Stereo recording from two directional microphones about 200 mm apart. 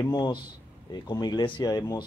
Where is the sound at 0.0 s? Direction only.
20° left (ahead or behind).